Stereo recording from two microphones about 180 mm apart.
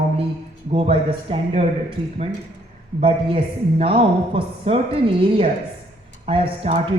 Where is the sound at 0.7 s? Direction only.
30° right (ahead or behind).